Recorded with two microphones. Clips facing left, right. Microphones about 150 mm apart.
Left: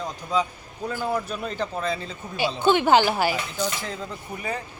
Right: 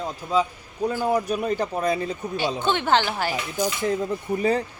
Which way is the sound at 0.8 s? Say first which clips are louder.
Right 4 dB; 15° right (ahead or behind).